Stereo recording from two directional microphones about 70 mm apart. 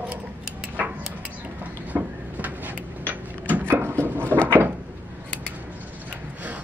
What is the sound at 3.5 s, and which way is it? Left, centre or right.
Wood, right.